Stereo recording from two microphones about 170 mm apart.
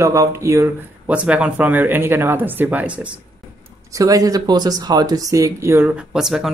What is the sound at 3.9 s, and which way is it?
Speech, 20° right (ahead or behind).